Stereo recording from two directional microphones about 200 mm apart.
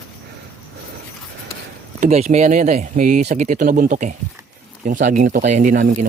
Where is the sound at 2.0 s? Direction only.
35° right (ahead or behind).